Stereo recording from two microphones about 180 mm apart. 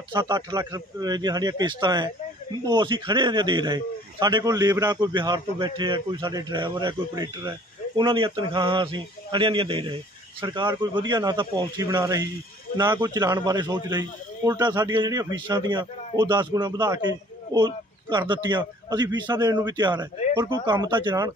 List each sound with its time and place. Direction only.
0.1 s a man's voice: 25° right (ahead or behind)